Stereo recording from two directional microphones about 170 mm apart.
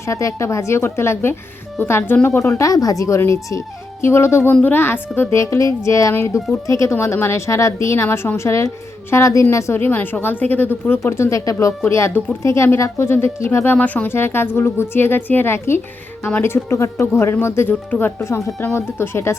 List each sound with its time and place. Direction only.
0.0 s a woman's voice: 20° left (ahead or behind)